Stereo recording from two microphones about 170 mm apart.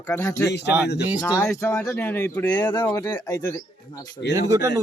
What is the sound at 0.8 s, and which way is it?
Speech, 75° left (ahead or behind).